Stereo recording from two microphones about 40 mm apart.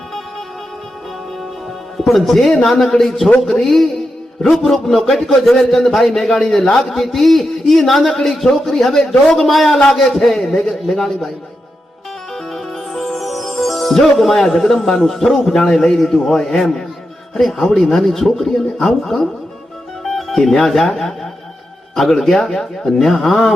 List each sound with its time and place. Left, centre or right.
2.0 s a man's voice: centre
12.5 s music: centre
15.7 s a man's voice: centre
22.4 s a man's voice: centre